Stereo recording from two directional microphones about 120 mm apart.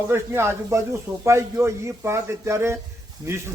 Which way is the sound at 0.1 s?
20° right (ahead or behind).